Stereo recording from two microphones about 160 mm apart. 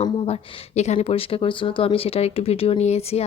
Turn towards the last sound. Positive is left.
turn(degrees=40)  # may be behind; listen again after turning